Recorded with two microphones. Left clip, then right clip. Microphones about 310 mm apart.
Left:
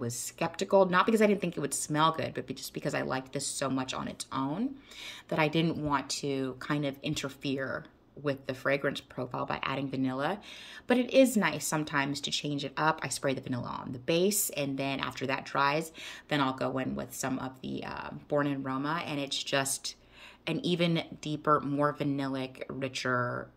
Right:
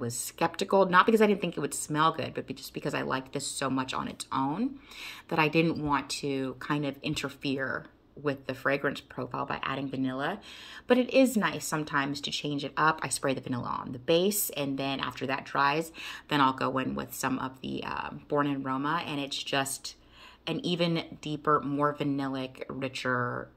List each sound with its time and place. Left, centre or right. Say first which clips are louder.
0.0 s speech: right 4 dB; centre
10.9 s speech: right 3 dB; left
11.1 s speech: even; centre
12.0 s speech: even; left
12.4 s speech: right 5 dB; centre